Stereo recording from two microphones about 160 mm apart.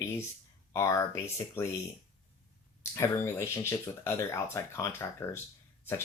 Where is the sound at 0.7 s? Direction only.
20° left (ahead or behind).